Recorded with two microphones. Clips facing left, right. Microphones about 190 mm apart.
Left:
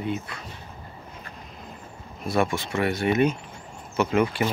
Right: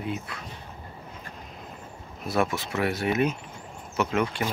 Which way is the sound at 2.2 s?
5° right (ahead or behind).